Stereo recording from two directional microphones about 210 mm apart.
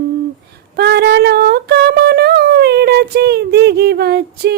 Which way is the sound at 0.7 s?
50° right (ahead or behind).